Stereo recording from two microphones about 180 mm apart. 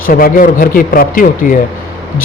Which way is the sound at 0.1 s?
50° left (ahead or behind).